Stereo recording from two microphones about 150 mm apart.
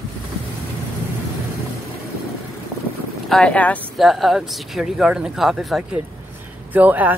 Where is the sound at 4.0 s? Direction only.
Centre (ahead or behind).